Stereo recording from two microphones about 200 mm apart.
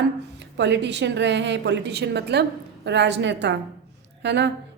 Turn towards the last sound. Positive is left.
turn(degrees=-60)  # may be behind; listen again after turning